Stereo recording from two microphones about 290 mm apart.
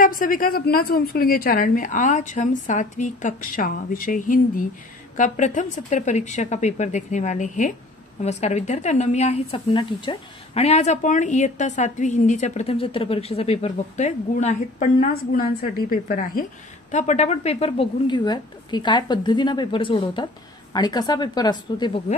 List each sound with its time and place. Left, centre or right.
0.0 s a woman's voice: left